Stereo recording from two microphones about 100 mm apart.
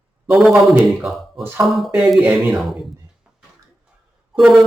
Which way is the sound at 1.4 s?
25° right (ahead or behind).